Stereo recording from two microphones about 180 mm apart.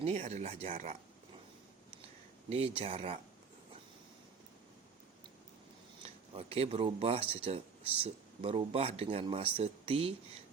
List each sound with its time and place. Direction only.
0.0 s speech: 40° right (ahead or behind)
2.5 s speech: 30° right (ahead or behind)
6.3 s speech: 30° right (ahead or behind)